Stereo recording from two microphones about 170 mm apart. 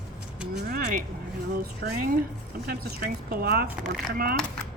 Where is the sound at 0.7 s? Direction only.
55° right (ahead or behind).